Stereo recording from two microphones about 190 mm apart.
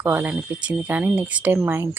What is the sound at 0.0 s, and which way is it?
Speech, 10° right (ahead or behind).